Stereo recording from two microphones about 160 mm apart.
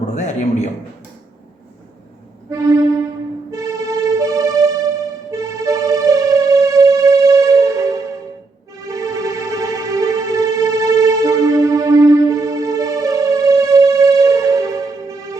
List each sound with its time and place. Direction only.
0.1 s a man's voice: 45° left (ahead or behind)
2.5 s music: 20° right (ahead or behind)
8.9 s music: 20° right (ahead or behind)